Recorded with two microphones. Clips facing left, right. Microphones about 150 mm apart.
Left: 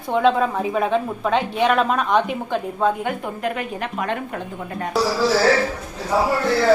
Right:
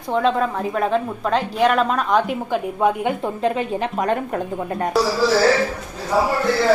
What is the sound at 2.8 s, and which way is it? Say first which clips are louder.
A woman's voice: right 2 dB; 20° right (ahead or behind).